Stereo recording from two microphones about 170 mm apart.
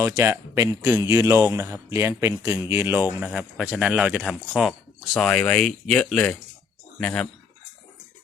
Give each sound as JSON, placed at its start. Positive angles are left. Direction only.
{"t": 0.0, "sound": "speech", "side_deg": -15}